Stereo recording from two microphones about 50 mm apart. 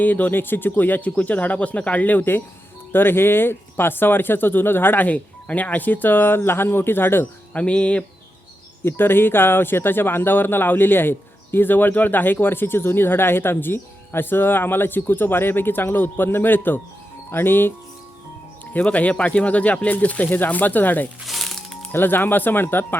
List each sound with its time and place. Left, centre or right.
0.0 s speech: left
2.9 s speech: left
7.5 s speech: left
8.8 s speech: left
18.6 s speech: left
21.2 s music: centre
21.9 s speech: left